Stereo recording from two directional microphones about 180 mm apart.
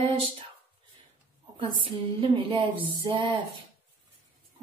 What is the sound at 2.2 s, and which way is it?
Speech, 30° right (ahead or behind).